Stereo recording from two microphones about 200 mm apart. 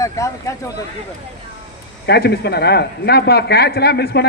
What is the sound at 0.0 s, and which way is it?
Speech, 15° left (ahead or behind).